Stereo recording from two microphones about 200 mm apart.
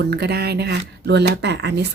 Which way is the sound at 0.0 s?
55° right (ahead or behind).